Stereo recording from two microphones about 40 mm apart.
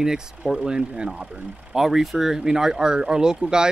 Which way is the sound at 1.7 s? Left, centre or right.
Centre.